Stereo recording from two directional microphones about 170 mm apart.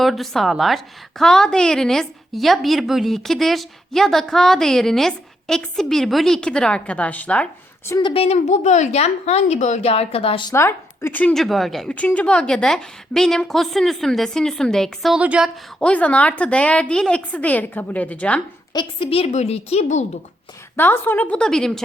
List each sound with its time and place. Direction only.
0.0 s a woman's voice: centre (ahead or behind)
7.9 s a woman's voice: 25° left (ahead or behind)
10.5 s a woman's voice: 15° left (ahead or behind); by 15.4 s 5° right (ahead or behind)
15.8 s a woman's voice: 10° left (ahead or behind)
18.7 s a woman's voice: 30° left (ahead or behind)
20.7 s a woman's voice: 10° left (ahead or behind)